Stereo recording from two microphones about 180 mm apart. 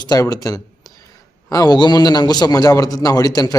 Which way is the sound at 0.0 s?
20° left (ahead or behind).